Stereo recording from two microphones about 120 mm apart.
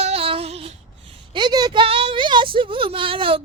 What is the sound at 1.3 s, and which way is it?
A woman's voice, 40° right (ahead or behind).